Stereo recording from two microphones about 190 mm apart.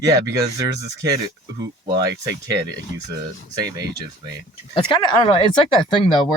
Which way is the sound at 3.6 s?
20° right (ahead or behind).